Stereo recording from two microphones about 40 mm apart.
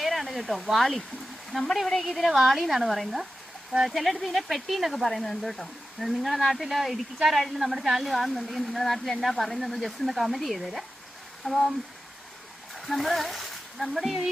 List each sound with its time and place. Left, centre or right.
0.0 s speech: centre
2.0 s speech: centre
11.4 s speech: left
12.7 s speech: centre